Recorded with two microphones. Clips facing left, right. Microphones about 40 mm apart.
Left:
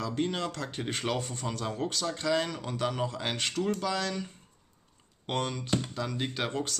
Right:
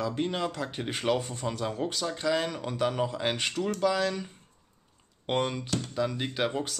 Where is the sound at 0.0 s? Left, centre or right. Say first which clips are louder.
Right 2 dB; centre.